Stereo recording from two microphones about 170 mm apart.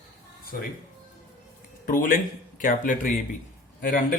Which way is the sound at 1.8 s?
55° left (ahead or behind).